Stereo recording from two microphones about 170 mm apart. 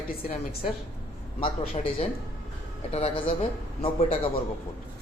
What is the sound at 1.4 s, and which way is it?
Speech, 30° left (ahead or behind).